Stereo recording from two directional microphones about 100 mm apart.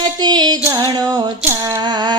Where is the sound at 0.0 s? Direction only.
45° right (ahead or behind).